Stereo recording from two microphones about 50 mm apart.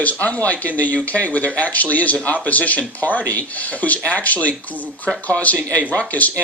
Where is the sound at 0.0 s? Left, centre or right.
Left.